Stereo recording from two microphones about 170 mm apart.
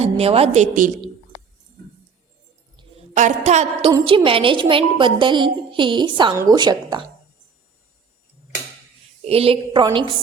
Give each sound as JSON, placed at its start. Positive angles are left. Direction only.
{"t": 0.0, "sound": "a woman's voice", "side_deg": -35}
{"t": 3.2, "sound": "a woman's voice", "side_deg": -45}
{"t": 9.2, "sound": "a woman's voice", "side_deg": -35}